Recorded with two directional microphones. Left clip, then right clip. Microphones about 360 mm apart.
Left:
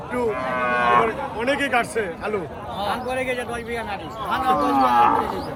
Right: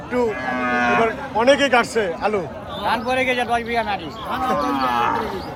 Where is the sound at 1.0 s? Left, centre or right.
Centre.